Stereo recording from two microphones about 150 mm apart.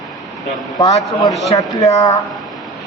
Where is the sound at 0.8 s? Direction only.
25° left (ahead or behind).